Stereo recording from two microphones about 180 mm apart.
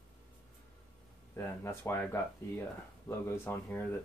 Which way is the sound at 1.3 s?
15° left (ahead or behind).